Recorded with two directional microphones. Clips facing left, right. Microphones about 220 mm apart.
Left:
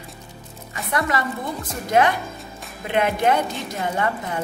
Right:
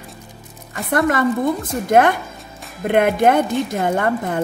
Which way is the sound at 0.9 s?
50° right (ahead or behind).